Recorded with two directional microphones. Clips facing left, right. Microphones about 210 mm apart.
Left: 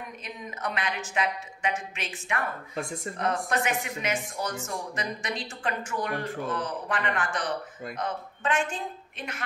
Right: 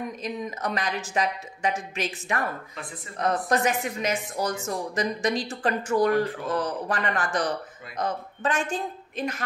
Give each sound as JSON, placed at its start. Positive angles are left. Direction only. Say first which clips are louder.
{"t": 0.2, "sound": "a woman's voice", "louder": "right 5 dB", "side_deg": -40}